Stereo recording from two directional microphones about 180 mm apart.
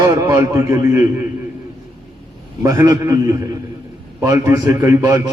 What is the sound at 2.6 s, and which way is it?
A man's voice, 15° right (ahead or behind).